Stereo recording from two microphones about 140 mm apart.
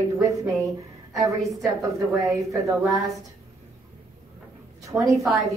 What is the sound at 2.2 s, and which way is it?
Speech, 25° right (ahead or behind).